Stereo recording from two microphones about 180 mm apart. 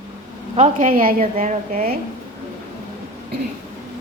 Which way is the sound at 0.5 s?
40° right (ahead or behind).